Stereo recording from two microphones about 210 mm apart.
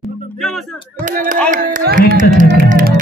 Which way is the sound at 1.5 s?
40° right (ahead or behind).